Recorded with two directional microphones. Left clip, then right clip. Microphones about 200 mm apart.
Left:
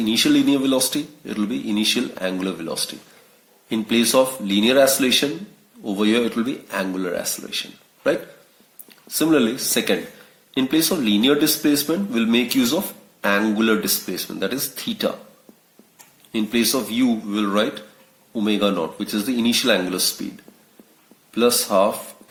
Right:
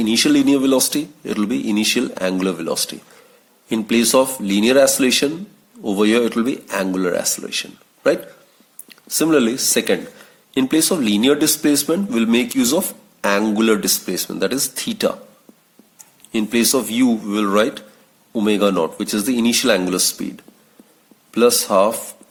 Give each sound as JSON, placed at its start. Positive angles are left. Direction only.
{"t": 0.0, "sound": "speech", "side_deg": -45}
{"t": 16.3, "sound": "speech", "side_deg": -45}
{"t": 21.3, "sound": "speech", "side_deg": -50}